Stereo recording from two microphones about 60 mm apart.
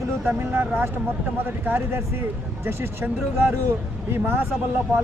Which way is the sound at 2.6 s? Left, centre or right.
Right.